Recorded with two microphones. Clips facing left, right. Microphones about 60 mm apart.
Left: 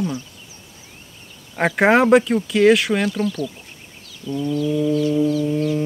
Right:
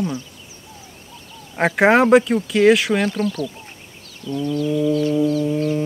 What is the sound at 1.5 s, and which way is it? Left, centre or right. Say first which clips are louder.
Speech: right 1 dB; centre.